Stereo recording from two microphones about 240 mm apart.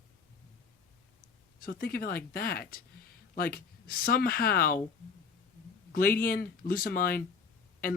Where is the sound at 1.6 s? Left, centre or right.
Left.